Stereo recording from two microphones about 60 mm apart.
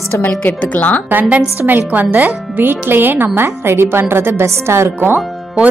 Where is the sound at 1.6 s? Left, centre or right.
Right.